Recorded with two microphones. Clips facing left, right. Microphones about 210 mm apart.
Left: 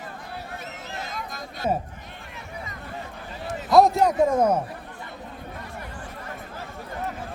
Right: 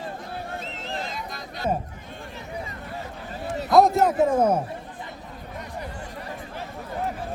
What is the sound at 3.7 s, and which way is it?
Speech, centre (ahead or behind).